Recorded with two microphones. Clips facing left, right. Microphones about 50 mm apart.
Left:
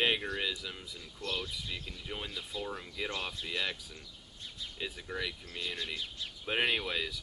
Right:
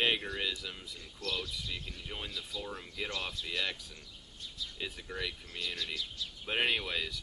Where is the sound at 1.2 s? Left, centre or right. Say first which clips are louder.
Even; left.